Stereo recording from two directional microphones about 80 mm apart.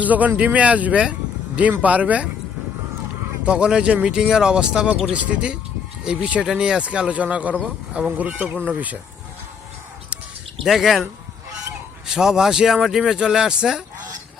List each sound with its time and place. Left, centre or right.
0.0 s speech: centre
3.4 s speech: centre
10.6 s speech: centre